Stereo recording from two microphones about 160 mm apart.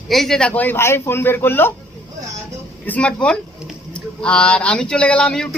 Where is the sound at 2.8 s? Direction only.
10° left (ahead or behind).